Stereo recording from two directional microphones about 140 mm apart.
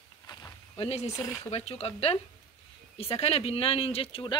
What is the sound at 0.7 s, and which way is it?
Speech, 50° left (ahead or behind).